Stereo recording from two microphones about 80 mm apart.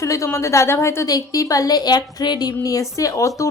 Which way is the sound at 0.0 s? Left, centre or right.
Left.